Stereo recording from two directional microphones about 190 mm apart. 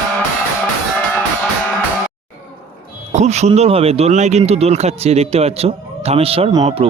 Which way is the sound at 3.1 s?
35° right (ahead or behind).